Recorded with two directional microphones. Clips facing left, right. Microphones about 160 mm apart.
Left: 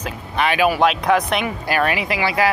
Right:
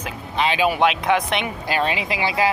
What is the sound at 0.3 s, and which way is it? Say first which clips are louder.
Speech: left 2 dB; 20° right (ahead or behind).